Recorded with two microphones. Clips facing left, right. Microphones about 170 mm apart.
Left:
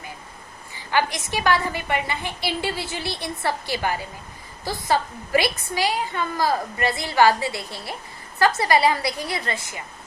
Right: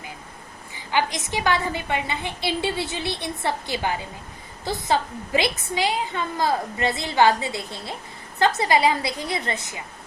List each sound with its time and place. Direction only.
0.9 s a woman's voice: 15° right (ahead or behind)